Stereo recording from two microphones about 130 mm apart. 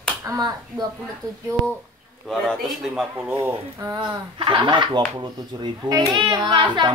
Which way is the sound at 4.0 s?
40° right (ahead or behind).